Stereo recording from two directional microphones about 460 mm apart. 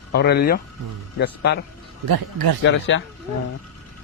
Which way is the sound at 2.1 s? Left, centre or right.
Right.